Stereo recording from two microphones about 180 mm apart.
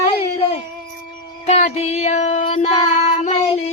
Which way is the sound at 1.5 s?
35° left (ahead or behind).